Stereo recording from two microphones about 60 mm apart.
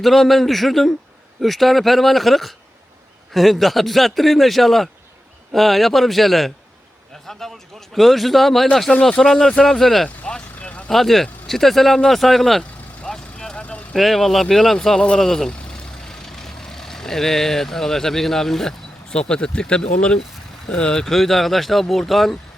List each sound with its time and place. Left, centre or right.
0.0 s a man's voice: centre
8.9 s speech: centre
10.2 s vehicle: centre
10.8 s speech: centre
13.0 s vehicle: centre
13.9 s speech: centre
15.2 s vehicle: centre
19.1 s speech: centre